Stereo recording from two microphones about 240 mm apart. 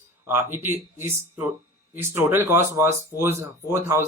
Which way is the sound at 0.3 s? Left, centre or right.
Centre.